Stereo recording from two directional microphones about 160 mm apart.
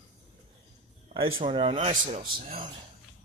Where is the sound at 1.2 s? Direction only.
30° right (ahead or behind).